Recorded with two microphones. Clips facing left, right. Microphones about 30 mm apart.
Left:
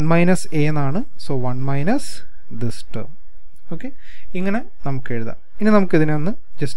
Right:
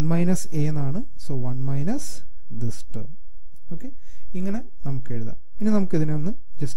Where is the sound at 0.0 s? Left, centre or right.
Left.